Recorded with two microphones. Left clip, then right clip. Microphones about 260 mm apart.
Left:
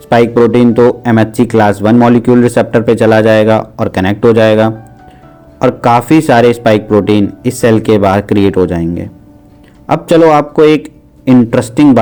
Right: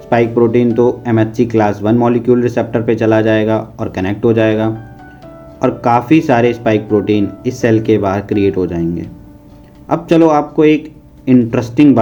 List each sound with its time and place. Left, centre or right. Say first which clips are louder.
0.1 s speech: left 4 dB; left